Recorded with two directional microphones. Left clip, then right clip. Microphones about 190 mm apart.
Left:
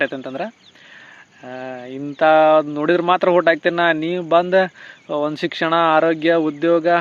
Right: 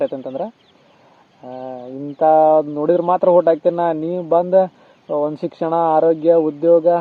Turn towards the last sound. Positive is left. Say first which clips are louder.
# right 3 dB
turn(degrees=45)  # may be behind; listen again after turning